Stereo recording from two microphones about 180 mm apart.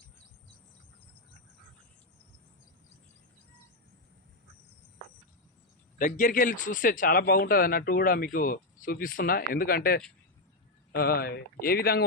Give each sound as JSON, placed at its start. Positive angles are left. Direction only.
{"t": 6.0, "sound": "speech", "side_deg": 45}